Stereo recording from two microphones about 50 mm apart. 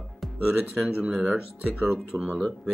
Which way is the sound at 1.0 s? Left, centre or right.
Centre.